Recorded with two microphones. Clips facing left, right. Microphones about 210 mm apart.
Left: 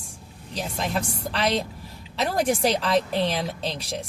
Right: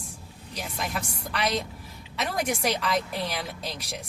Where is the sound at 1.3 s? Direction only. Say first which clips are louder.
Left 3 dB; 30° left (ahead or behind).